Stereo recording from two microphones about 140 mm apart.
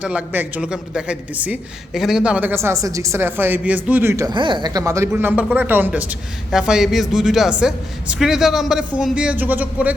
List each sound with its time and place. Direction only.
0.0 s speech: 10° right (ahead or behind)
4.3 s speech: 35° right (ahead or behind)
4.8 s a man's voice: 20° right (ahead or behind)